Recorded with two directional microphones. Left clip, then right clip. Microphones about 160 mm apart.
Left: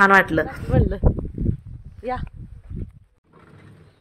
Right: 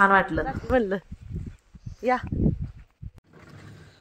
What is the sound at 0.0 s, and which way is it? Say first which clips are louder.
Speech: left 5 dB; 20° left (ahead or behind).